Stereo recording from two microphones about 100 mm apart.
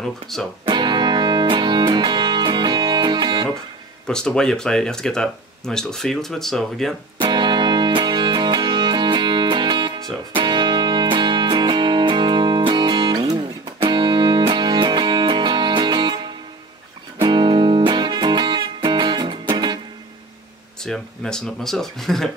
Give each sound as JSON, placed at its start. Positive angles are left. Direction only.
{"t": 0.3, "sound": "speech", "side_deg": 5}
{"t": 0.7, "sound": "music", "side_deg": -50}
{"t": 4.1, "sound": "speech", "side_deg": 5}
{"t": 7.2, "sound": "music", "side_deg": -50}
{"t": 20.8, "sound": "speech", "side_deg": 5}